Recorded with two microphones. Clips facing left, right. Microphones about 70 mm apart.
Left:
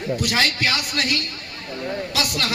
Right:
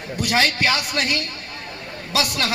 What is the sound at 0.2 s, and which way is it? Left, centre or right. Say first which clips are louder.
A man's voice: right 6 dB; right.